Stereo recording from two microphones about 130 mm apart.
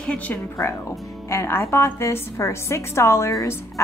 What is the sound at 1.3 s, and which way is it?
A woman's voice, 20° left (ahead or behind).